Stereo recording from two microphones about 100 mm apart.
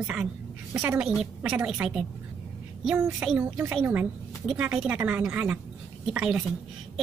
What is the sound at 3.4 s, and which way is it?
A woman's voice, 15° right (ahead or behind).